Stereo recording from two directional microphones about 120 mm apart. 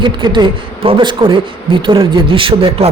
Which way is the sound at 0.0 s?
40° right (ahead or behind).